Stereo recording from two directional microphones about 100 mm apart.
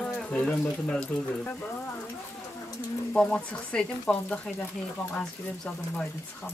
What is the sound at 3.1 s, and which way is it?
Speech, 10° left (ahead or behind).